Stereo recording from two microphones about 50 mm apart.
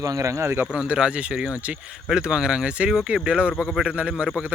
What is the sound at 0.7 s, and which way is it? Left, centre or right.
Speech, centre.